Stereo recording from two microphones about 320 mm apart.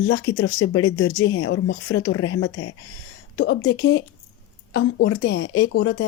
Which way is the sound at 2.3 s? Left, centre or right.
Left.